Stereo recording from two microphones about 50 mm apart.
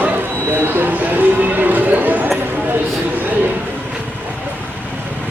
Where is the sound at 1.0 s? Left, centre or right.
Right.